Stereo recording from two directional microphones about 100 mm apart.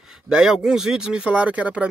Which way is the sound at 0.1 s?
5° right (ahead or behind).